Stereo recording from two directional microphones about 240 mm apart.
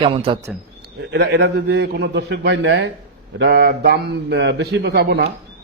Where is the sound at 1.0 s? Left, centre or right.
Right.